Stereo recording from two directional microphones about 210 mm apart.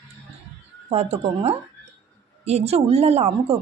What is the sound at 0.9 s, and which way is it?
Speech, 30° right (ahead or behind).